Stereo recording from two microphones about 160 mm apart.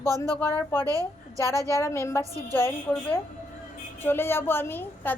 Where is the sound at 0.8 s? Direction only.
20° right (ahead or behind).